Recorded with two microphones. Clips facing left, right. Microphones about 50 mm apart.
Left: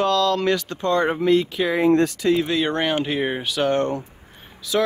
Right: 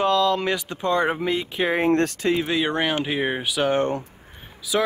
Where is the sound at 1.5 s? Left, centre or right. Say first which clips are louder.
Left 1 dB; right.